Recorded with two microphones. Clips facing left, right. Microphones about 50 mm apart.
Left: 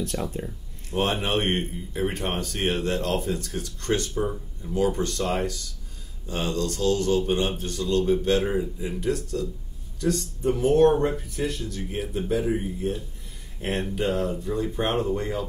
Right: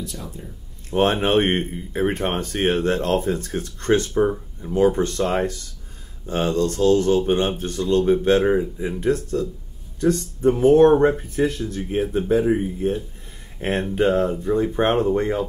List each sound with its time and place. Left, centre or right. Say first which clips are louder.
0.0 s speech: left 4 dB; left
0.8 s speech: right 6 dB; right